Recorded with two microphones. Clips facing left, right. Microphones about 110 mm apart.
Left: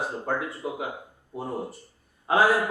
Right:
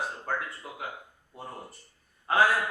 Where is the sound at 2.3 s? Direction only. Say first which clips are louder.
Left 3 dB; 5° left (ahead or behind).